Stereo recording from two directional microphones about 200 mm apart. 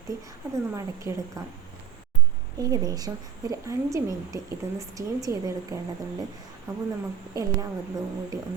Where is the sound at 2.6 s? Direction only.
20° right (ahead or behind).